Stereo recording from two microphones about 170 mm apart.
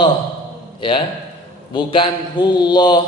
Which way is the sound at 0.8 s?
30° left (ahead or behind).